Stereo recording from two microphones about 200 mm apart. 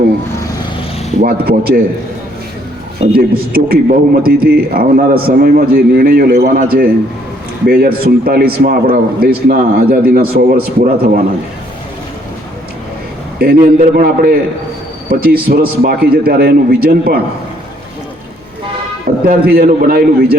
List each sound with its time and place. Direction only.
1.2 s a man's voice: 50° right (ahead or behind)
3.2 s a man's voice: 45° right (ahead or behind)
13.4 s a man's voice: 45° right (ahead or behind)
19.2 s a man's voice: 50° right (ahead or behind)